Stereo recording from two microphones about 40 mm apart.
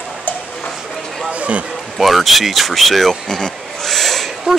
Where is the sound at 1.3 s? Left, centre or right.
Right.